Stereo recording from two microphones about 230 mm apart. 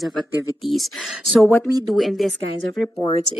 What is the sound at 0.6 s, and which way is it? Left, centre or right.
Speech, centre.